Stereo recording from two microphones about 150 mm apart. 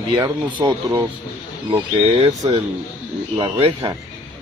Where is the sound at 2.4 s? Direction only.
35° right (ahead or behind).